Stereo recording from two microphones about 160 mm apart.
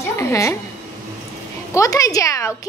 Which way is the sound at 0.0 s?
20° left (ahead or behind).